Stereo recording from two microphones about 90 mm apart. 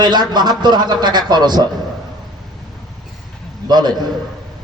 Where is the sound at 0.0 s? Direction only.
50° right (ahead or behind).